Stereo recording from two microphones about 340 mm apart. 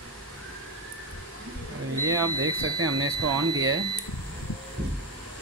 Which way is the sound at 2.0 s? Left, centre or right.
Centre.